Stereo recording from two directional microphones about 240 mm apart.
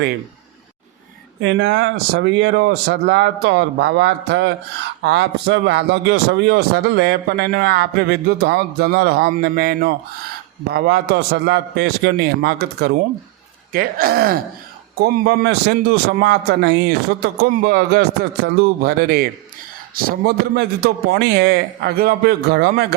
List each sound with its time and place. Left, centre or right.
1.4 s a man's voice: right